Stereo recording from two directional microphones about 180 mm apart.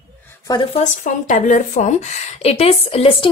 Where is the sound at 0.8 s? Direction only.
45° left (ahead or behind).